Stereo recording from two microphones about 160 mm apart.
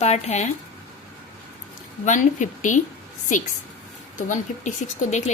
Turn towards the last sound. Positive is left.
turn(degrees=45)  # may be behind; listen again after turning